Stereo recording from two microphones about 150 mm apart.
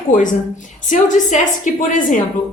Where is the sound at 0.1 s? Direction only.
60° left (ahead or behind).